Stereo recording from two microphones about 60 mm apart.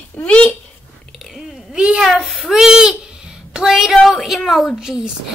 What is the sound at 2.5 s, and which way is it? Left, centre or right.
A woman's voice, centre.